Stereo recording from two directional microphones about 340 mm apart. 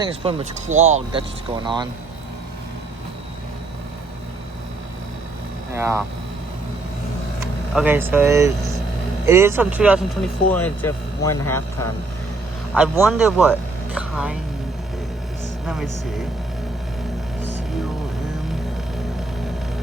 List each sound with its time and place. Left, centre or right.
0.0 s speech: centre
5.7 s speech: centre
7.7 s speech: centre
12.7 s speech: centre
15.6 s speech: centre